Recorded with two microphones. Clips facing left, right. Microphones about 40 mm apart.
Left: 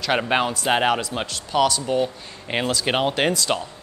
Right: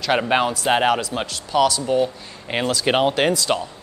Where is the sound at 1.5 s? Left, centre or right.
Centre.